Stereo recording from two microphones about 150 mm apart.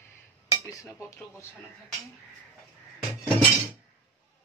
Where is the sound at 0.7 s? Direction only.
20° left (ahead or behind).